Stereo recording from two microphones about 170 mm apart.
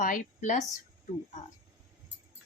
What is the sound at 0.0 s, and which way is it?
Speech, 50° left (ahead or behind).